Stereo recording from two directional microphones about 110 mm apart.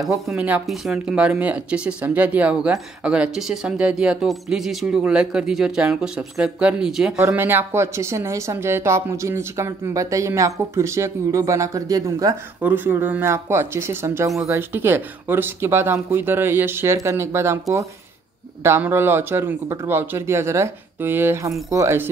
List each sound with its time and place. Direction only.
0.0 s speech: centre (ahead or behind)
7.2 s a woman's voice: 20° right (ahead or behind)
12.5 s a woman's voice: 15° right (ahead or behind)